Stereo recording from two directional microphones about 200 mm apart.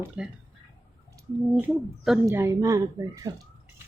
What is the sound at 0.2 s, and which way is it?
Speech, 5° right (ahead or behind).